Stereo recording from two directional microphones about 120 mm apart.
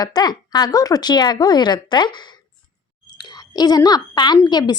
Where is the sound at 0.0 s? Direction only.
35° left (ahead or behind).